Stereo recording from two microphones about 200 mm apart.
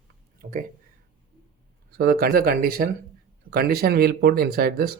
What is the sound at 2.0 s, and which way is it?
Speech, 50° right (ahead or behind).